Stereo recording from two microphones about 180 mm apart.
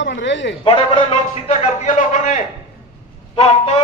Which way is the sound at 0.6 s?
30° left (ahead or behind).